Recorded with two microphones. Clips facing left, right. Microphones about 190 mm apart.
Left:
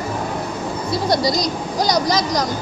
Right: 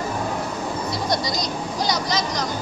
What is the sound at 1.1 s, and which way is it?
Speech, 35° left (ahead or behind).